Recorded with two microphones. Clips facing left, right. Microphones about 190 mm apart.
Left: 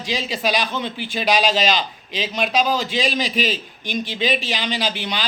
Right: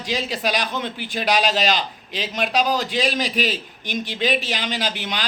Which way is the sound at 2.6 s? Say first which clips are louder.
Right 1 dB; 15° right (ahead or behind).